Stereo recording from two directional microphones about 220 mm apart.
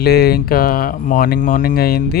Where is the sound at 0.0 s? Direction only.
45° left (ahead or behind).